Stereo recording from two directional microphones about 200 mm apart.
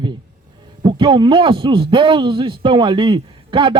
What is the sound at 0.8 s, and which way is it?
A man's voice, 25° right (ahead or behind).